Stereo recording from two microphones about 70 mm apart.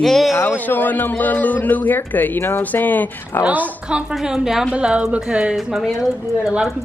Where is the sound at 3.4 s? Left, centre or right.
Right.